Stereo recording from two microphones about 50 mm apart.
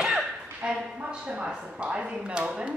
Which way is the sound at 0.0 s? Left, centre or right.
Centre.